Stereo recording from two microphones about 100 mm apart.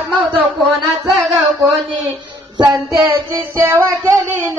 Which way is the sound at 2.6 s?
40° right (ahead or behind).